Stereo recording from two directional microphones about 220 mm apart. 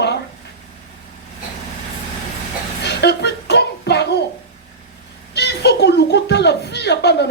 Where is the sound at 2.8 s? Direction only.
50° left (ahead or behind).